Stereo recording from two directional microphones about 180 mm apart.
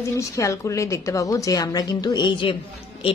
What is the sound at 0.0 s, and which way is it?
A woman's voice, 15° left (ahead or behind).